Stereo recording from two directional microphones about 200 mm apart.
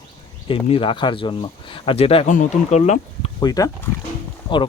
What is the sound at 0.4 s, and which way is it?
Speech, 25° left (ahead or behind).